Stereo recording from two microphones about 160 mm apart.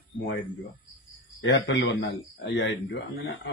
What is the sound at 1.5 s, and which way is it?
A man's voice, 90° left.